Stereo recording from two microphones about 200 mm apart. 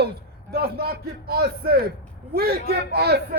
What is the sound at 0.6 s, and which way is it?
A man's voice, 50° right (ahead or behind).